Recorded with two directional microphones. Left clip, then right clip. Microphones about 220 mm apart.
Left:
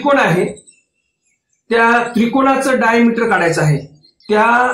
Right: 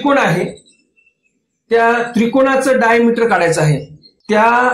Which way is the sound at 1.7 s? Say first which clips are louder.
Even; 30° right (ahead or behind).